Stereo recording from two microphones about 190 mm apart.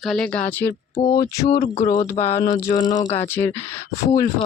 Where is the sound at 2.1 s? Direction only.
15° left (ahead or behind).